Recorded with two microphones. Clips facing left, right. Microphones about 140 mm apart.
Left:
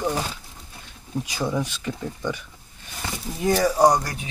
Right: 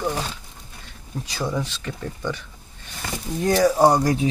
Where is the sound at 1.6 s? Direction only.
15° left (ahead or behind).